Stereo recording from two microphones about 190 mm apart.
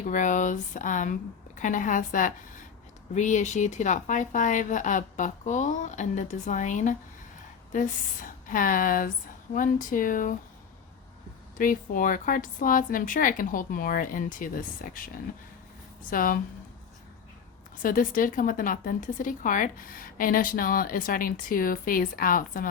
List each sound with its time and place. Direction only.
0.0 s speech: 40° left (ahead or behind)
11.5 s speech: 45° left (ahead or behind)
17.8 s speech: 45° left (ahead or behind)